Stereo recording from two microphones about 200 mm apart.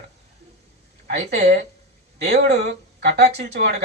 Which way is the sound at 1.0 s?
55° right (ahead or behind).